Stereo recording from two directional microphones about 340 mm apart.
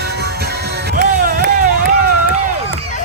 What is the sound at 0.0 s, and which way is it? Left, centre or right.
Music, right.